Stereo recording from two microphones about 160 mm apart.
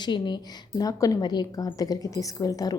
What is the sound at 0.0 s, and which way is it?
A woman's voice, 25° left (ahead or behind).